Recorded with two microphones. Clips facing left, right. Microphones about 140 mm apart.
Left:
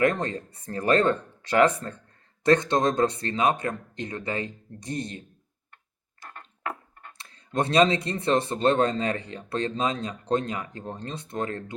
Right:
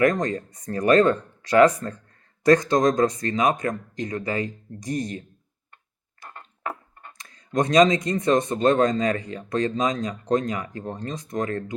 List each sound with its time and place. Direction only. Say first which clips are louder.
0.0 s speech: right 3 dB; 30° left (ahead or behind)
7.2 s speech: right 3 dB; 30° left (ahead or behind)